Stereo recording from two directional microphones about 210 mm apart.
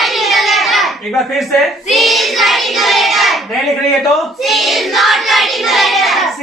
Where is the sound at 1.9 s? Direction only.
Centre (ahead or behind).